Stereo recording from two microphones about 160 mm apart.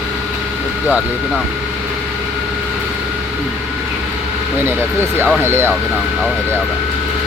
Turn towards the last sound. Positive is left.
turn(degrees=-15)  # may be behind; listen again after turning